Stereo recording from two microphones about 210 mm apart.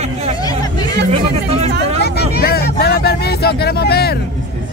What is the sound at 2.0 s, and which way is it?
Vehicle, 50° left (ahead or behind).